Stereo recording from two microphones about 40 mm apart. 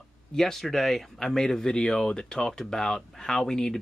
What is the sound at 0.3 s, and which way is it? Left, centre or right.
Speech, centre.